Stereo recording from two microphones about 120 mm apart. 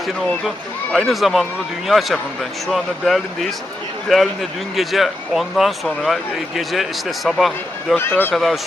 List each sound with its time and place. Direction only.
0.9 s speech: centre (ahead or behind)
7.9 s speech: 15° left (ahead or behind)
8.3 s speech: centre (ahead or behind)